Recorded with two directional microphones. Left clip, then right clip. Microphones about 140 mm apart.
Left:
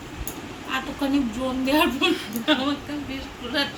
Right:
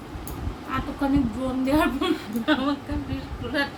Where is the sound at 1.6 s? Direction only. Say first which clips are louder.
Left 2 dB; 10° right (ahead or behind).